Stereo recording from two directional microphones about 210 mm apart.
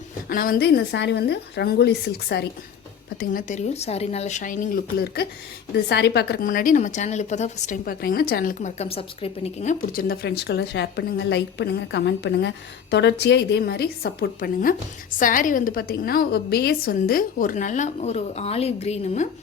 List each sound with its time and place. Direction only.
0.3 s a woman's voice: 45° left (ahead or behind)
3.2 s a woman's voice: 40° left (ahead or behind)
9.9 s a woman's voice: 45° left (ahead or behind)